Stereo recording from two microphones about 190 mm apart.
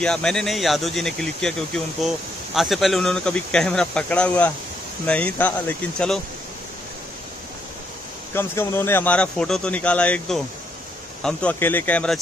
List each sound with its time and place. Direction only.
0.0 s speech: 5° left (ahead or behind)
8.4 s speech: 10° left (ahead or behind)